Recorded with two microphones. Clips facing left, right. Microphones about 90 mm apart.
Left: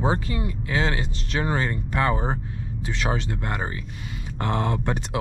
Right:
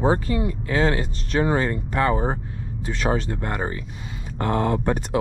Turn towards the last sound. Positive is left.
turn(degrees=-40)  # may be behind; listen again after turning